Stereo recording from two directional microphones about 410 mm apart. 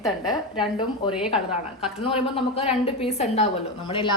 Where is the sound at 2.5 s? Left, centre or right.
Centre.